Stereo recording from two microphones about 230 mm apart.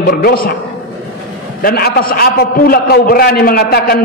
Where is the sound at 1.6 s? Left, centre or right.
Left.